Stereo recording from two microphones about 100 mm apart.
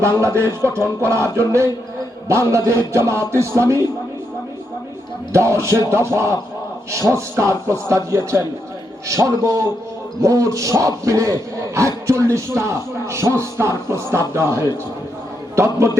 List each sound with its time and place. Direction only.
0.0 s speech: 30° right (ahead or behind)
5.3 s speech: 30° right (ahead or behind)